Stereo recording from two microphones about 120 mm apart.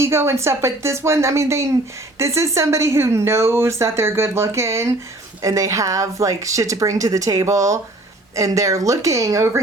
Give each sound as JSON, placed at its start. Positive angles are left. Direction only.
{"t": 0.0, "sound": "speech", "side_deg": -20}